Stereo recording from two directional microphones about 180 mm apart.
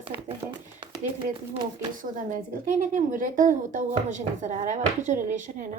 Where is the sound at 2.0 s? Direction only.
45° right (ahead or behind).